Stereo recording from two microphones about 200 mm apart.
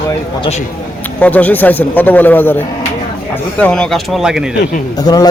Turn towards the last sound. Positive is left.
turn(degrees=20)  # may be behind; listen again after turning